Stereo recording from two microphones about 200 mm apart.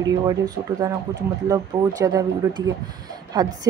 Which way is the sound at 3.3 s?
20° right (ahead or behind).